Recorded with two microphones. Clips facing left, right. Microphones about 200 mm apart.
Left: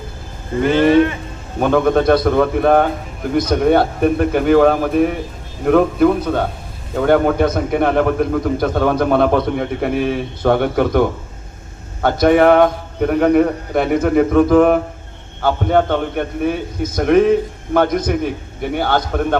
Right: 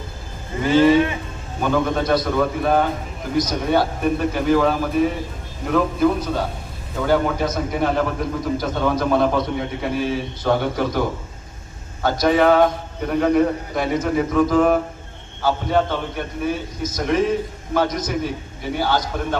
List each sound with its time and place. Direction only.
0.6 s a man's voice: 60° left (ahead or behind)